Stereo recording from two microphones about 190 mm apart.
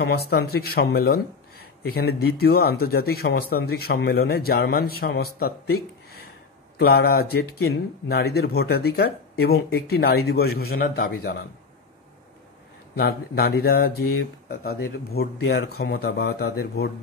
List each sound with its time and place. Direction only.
0.0 s speech: 55° left (ahead or behind)
12.9 s speech: 55° left (ahead or behind)